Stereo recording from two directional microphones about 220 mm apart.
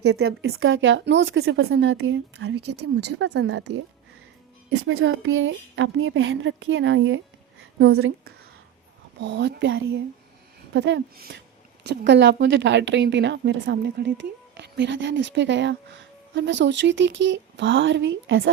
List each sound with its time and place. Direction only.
0.1 s speech: 50° right (ahead or behind)
2.8 s speech: 90° right
3.2 s speech: 50° right (ahead or behind)
4.9 s a woman's voice: 65° right (ahead or behind)
9.2 s speech: 50° right (ahead or behind)